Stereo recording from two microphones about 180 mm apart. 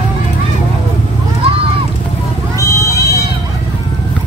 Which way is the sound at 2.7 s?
15° left (ahead or behind).